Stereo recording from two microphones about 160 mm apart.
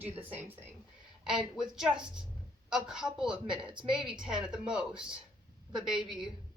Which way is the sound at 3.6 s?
30° right (ahead or behind).